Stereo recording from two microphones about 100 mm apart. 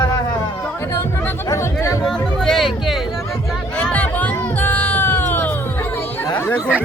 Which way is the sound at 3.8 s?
15° left (ahead or behind).